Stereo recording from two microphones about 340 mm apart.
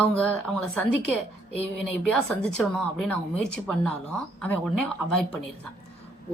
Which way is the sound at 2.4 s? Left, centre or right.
Centre.